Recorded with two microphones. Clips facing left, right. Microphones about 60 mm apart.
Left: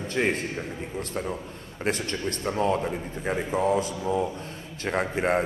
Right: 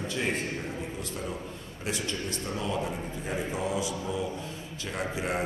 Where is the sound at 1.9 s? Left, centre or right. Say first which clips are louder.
Left 5 dB; left.